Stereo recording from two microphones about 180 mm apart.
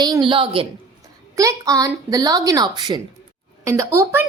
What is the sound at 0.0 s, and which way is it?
Speech, 25° right (ahead or behind).